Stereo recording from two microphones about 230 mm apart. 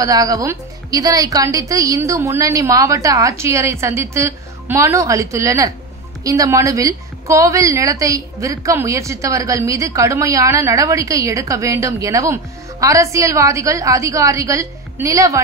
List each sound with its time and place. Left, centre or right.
0.0 s a woman's voice: centre